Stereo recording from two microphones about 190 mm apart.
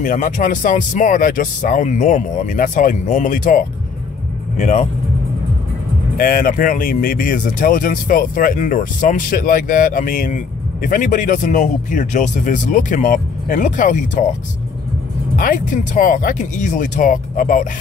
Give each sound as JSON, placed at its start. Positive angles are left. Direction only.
{"t": 0.0, "sound": "speech", "side_deg": 45}
{"t": 6.1, "sound": "speech", "side_deg": 50}
{"t": 15.3, "sound": "speech", "side_deg": 45}